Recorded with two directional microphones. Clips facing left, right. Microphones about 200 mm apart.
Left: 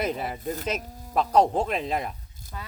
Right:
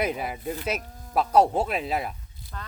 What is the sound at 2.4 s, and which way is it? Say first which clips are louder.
Speech: left 1 dB; 45° left (ahead or behind).